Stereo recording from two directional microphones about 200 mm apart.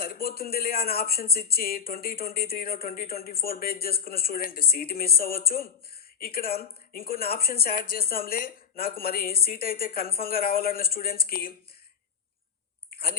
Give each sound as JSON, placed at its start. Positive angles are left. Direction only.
{"t": 0.0, "sound": "speech", "side_deg": 50}